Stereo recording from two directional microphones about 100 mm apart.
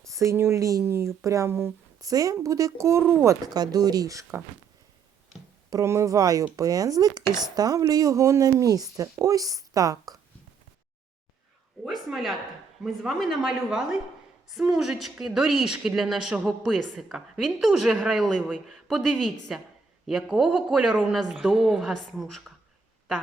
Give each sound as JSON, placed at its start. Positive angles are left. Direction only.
{"t": 0.0, "sound": "speech", "side_deg": -30}
{"t": 2.0, "sound": "speech", "side_deg": -35}
{"t": 3.0, "sound": "a woman's voice", "side_deg": 5}
{"t": 3.5, "sound": "speech", "side_deg": -40}
{"t": 5.7, "sound": "speech", "side_deg": -30}
{"t": 12.0, "sound": "a woman's voice", "side_deg": 0}